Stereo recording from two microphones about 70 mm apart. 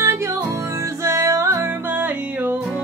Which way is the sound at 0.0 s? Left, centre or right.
Right.